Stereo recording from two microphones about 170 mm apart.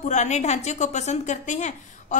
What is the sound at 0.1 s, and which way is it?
A woman's voice, 45° left (ahead or behind).